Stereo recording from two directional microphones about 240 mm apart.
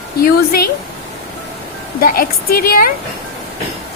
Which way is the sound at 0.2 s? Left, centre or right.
Left.